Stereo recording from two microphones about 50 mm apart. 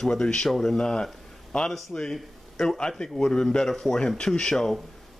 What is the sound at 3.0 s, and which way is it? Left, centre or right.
A man's voice, centre.